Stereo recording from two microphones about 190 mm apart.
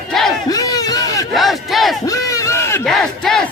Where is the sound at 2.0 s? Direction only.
15° left (ahead or behind).